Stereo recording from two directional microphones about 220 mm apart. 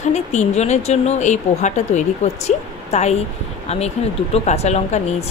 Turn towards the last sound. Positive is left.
turn(degrees=30)  # may be behind; listen again after turning